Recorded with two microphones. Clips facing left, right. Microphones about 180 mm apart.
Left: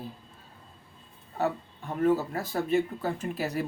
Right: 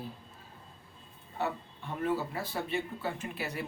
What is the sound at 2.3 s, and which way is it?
Speech, 40° left (ahead or behind).